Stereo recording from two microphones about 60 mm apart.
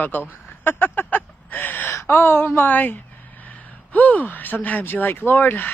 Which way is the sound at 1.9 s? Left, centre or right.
Left.